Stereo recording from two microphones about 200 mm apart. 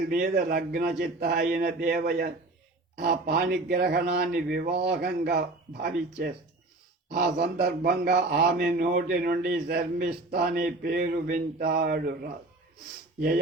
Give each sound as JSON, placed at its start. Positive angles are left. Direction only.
{"t": 0.1, "sound": "a man's voice", "side_deg": -45}